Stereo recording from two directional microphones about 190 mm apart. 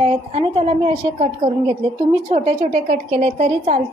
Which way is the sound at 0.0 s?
30° right (ahead or behind).